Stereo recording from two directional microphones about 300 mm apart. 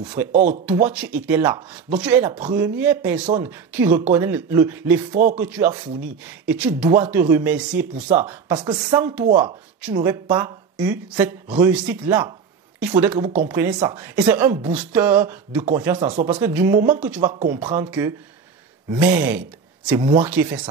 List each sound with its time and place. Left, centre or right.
0.3 s speech: right
0.7 s speech: centre
5.1 s speech: right
5.4 s speech: centre
16.0 s speech: right
16.3 s speech: centre
20.0 s speech: centre